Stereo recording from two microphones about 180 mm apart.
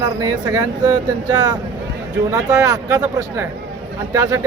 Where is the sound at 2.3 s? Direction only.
20° right (ahead or behind).